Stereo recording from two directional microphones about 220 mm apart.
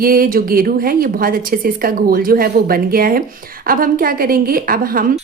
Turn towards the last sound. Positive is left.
turn(degrees=-40)  # may be behind; listen again after turning